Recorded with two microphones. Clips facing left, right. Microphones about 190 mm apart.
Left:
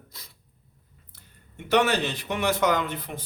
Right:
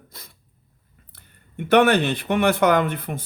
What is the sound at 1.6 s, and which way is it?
Speech, 60° right (ahead or behind).